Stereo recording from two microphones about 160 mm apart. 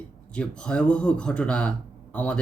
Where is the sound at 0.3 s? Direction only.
5° left (ahead or behind).